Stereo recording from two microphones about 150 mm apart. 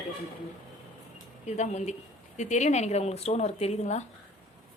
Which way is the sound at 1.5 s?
50° left (ahead or behind).